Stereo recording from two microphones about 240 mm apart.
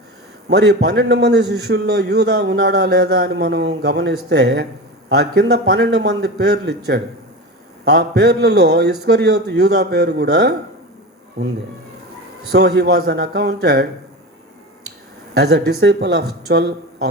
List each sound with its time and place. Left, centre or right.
0.4 s a man's voice: right
12.5 s a man's voice: right
15.4 s a man's voice: right